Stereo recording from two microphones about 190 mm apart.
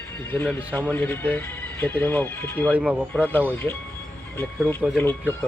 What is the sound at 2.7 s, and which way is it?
Speech, 10° right (ahead or behind).